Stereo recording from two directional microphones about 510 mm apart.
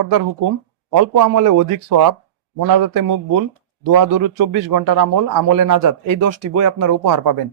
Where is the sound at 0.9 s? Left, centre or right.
Right.